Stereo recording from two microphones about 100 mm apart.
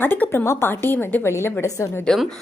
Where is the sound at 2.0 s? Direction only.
5° left (ahead or behind).